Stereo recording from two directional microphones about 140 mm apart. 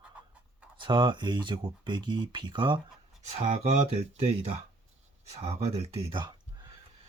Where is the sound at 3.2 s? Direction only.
50° right (ahead or behind).